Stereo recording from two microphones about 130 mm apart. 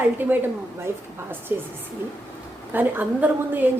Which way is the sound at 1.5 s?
15° right (ahead or behind).